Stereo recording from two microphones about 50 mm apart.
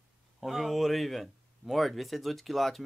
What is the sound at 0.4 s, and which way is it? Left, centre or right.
Speech, centre.